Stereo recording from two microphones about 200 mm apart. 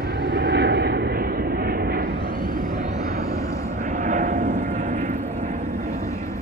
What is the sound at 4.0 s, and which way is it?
Vehicle, 40° right (ahead or behind).